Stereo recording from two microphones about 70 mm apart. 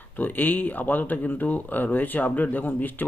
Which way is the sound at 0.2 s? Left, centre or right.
Left.